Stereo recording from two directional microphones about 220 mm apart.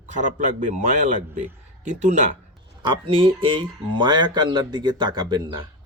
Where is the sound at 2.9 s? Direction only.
25° right (ahead or behind).